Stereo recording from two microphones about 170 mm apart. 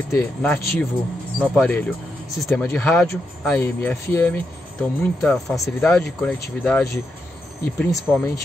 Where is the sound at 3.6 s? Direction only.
15° left (ahead or behind).